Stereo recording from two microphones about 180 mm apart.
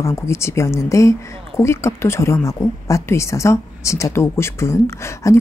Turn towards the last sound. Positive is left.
turn(degrees=15)  # may be behind; listen again after turning